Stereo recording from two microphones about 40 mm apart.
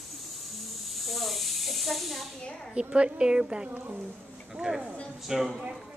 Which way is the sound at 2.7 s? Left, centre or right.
Right.